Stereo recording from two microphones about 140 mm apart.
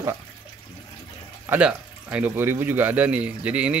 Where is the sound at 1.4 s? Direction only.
10° right (ahead or behind).